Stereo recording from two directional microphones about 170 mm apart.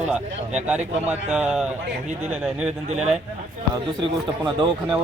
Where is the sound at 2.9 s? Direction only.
40° right (ahead or behind).